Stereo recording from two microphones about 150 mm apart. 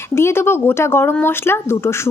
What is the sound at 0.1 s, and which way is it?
Speech, 15° left (ahead or behind).